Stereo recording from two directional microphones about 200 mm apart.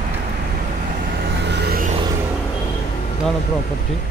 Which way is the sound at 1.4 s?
55° right (ahead or behind).